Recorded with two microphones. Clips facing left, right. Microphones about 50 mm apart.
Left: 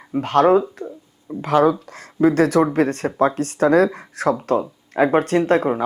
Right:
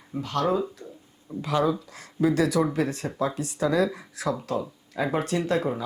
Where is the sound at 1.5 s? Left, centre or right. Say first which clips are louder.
Left 8 dB; left.